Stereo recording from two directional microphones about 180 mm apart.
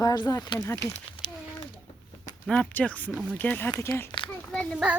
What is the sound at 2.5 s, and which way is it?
A child's voice, 10° left (ahead or behind).